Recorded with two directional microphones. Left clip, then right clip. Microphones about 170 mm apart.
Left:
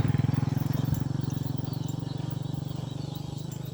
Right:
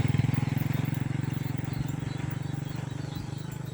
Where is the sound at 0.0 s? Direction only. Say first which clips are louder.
Even; 25° right (ahead or behind).